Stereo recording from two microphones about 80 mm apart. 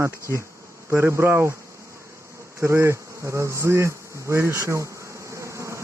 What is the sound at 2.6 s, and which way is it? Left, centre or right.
Bee, right.